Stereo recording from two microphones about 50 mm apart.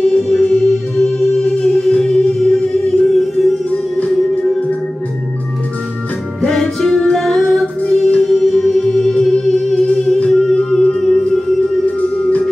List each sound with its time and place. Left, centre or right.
0.0 s music: centre
6.4 s music: centre
10.5 s humming: centre